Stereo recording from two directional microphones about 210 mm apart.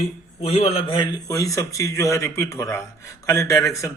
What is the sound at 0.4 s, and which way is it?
Speech, 30° left (ahead or behind).